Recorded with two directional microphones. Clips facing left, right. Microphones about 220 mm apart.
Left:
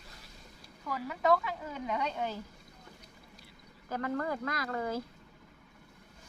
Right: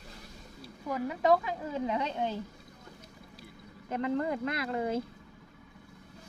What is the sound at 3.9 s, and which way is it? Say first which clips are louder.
Speech: right 3 dB; 20° right (ahead or behind).